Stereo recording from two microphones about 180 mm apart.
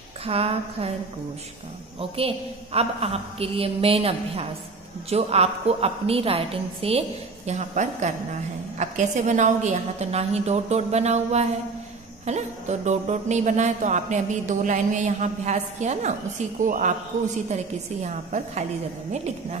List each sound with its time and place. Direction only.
0.2 s speech: 35° right (ahead or behind)
2.0 s a man's voice: 30° right (ahead or behind)
18.0 s speech: 40° right (ahead or behind)